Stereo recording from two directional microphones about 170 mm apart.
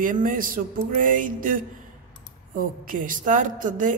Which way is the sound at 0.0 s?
50° right (ahead or behind).